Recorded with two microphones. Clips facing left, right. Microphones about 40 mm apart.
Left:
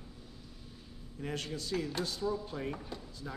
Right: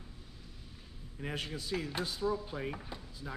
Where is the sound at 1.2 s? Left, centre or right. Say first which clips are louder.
Left 1 dB; centre.